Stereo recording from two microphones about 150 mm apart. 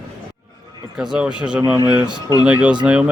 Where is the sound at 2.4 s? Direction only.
5° right (ahead or behind).